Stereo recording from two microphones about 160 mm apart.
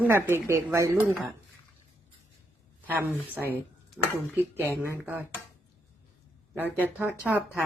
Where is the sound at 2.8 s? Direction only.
10° right (ahead or behind).